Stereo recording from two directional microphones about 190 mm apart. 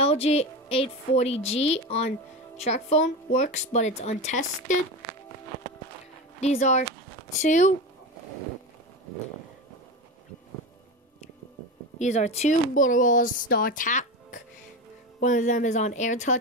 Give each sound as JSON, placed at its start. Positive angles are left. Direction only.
{"t": 0.0, "sound": "speech", "side_deg": 30}
{"t": 6.4, "sound": "speech", "side_deg": 35}
{"t": 12.0, "sound": "speech", "side_deg": 35}